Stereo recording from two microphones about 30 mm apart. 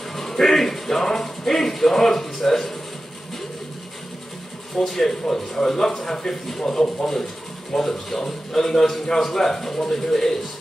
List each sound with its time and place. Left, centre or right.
0.1 s speech: centre
4.9 s a man's voice: centre
7.7 s speech: centre